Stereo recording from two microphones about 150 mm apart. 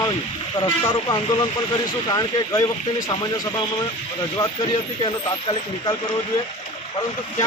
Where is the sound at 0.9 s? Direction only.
35° left (ahead or behind).